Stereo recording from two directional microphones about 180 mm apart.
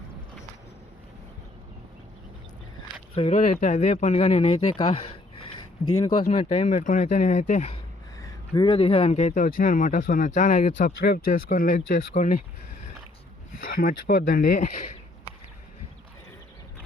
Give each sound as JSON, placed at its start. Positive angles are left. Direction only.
{"t": 3.2, "sound": "speech", "side_deg": 40}
{"t": 8.2, "sound": "speech", "side_deg": 25}
{"t": 13.7, "sound": "speech", "side_deg": 50}